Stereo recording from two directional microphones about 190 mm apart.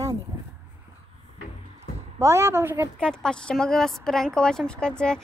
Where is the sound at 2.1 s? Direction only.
15° right (ahead or behind).